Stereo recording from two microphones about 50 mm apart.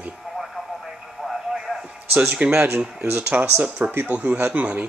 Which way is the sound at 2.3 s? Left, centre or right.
Right.